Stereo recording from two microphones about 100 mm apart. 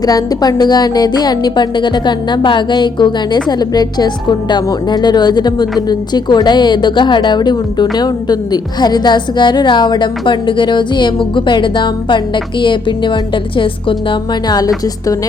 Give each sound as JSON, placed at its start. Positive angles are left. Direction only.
{"t": 0.0, "sound": "a woman's voice", "side_deg": 40}